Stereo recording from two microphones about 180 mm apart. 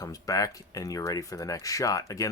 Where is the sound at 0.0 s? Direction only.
20° left (ahead or behind).